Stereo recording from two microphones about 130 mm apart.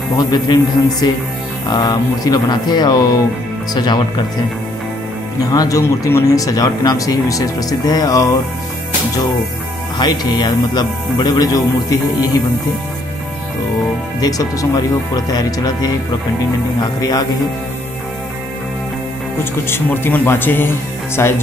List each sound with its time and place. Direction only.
0.2 s a man's voice: 30° left (ahead or behind)
5.5 s speech: 25° left (ahead or behind)
9.9 s a man's voice: 35° left (ahead or behind)
14.2 s speech: 30° left (ahead or behind)
19.7 s speech: 15° left (ahead or behind)